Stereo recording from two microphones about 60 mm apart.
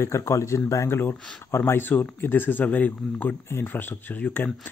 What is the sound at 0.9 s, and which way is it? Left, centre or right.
Speech, left.